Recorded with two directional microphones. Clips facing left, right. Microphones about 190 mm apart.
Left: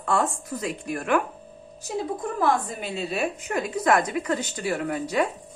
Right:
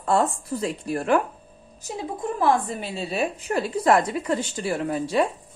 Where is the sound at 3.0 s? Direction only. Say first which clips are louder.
Right 1 dB; 30° right (ahead or behind).